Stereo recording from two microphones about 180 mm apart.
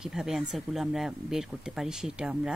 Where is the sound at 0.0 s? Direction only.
Centre (ahead or behind).